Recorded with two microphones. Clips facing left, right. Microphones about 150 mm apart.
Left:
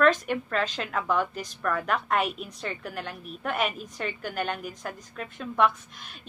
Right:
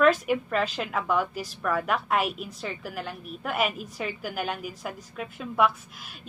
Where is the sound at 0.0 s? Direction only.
5° right (ahead or behind).